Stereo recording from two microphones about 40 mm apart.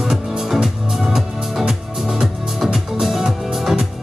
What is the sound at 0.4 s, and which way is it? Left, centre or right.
Music, centre.